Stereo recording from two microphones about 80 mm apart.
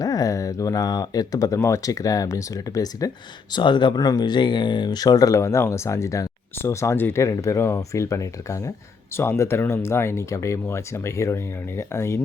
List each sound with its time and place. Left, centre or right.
0.0 s a sound: left
1.5 s speech: left
3.5 s speech: left
4.0 s speech: left
6.9 s speech: left
7.2 s speech: left